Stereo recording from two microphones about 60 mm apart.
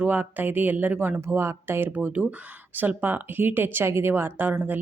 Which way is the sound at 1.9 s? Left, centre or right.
Right.